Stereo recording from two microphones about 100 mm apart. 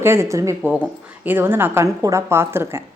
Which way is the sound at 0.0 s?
25° right (ahead or behind).